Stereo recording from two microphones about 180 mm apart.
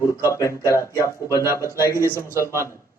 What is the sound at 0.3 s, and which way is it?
A man's voice, 15° left (ahead or behind).